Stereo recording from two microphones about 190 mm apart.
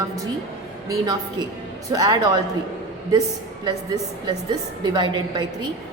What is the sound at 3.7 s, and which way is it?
A woman's voice, 20° right (ahead or behind).